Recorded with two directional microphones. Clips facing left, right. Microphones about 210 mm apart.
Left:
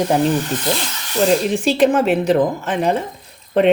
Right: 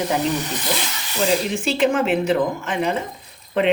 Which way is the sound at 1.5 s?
35° left (ahead or behind).